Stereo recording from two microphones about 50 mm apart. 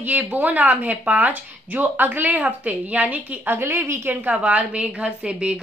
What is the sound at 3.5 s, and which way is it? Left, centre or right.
Speech, right.